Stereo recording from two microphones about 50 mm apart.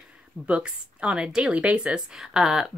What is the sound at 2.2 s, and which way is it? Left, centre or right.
Speech, centre.